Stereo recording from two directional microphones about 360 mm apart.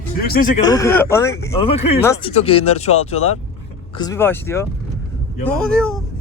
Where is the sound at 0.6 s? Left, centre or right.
Centre.